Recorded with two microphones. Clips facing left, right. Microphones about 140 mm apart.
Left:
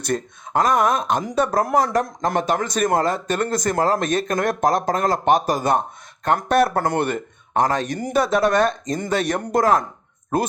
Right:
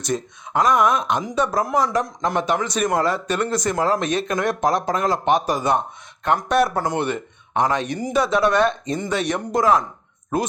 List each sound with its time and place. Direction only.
0.0 s speech: 50° left (ahead or behind)
1.4 s speech: 55° left (ahead or behind)